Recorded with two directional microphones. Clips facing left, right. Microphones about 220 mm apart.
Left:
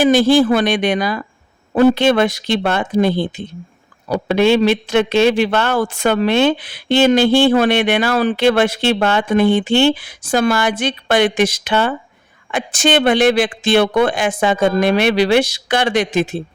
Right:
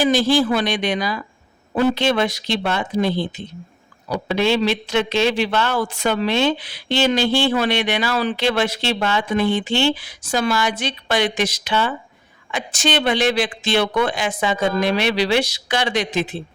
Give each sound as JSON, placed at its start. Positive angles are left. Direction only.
{"t": 0.0, "sound": "a man's voice", "side_deg": 55}